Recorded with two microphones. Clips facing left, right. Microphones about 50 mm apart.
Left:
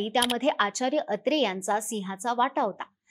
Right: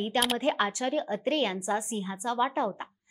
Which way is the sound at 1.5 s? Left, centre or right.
Centre.